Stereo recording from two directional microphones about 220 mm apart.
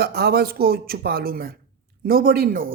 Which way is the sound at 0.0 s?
45° right (ahead or behind).